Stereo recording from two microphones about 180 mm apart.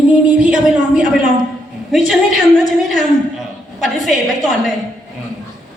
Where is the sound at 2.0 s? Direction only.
50° right (ahead or behind).